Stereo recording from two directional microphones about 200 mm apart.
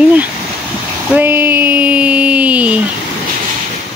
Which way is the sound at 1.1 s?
10° right (ahead or behind).